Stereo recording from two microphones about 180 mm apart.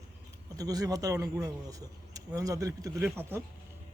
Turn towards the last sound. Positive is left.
turn(degrees=-10)  # may be behind; listen again after turning